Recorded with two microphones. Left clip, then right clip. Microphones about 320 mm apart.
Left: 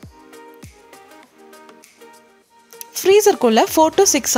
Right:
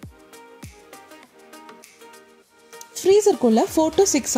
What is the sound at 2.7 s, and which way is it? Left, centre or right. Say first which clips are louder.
Music: left 3 dB; left.